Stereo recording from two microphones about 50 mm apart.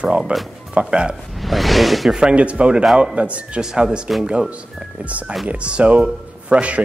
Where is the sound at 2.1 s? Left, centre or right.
Right.